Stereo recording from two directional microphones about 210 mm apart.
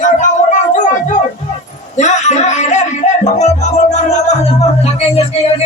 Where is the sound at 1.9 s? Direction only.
35° left (ahead or behind).